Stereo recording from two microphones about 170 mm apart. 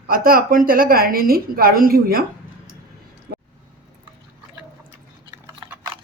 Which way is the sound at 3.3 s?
70° right (ahead or behind).